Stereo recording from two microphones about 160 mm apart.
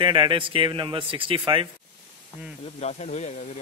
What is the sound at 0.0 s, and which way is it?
Speech, 30° right (ahead or behind).